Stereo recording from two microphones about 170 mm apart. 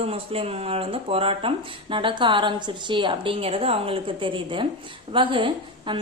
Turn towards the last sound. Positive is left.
turn(degrees=-30)  # may be behind; listen again after turning